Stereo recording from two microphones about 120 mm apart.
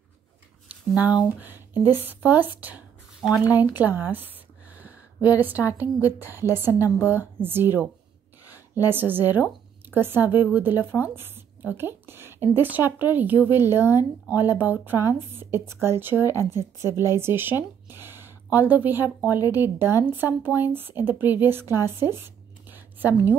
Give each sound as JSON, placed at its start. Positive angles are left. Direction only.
{"t": 0.7, "sound": "speech", "side_deg": -10}